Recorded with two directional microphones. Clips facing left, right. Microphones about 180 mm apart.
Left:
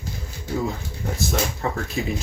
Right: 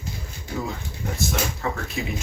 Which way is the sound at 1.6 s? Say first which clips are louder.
Left 2 dB; 35° left (ahead or behind).